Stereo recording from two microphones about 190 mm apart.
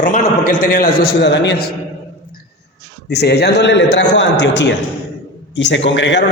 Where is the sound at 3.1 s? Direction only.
60° left (ahead or behind).